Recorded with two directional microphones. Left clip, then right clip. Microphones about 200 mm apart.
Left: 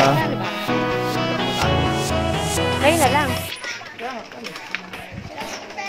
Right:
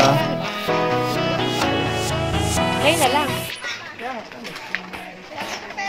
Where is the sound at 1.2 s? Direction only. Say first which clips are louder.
Right 1 dB; centre (ahead or behind).